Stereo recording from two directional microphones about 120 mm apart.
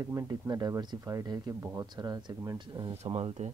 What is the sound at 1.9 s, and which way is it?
Speech, 35° right (ahead or behind).